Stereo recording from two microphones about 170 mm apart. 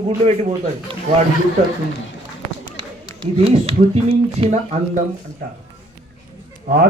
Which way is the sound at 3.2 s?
35° right (ahead or behind).